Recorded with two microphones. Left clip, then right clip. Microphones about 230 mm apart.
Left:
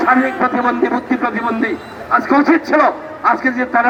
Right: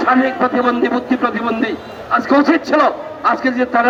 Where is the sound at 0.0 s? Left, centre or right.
Right.